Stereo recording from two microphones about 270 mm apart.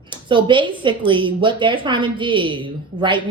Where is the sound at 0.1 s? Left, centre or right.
Centre.